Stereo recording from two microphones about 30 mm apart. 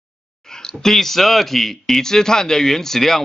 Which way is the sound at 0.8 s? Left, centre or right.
Centre.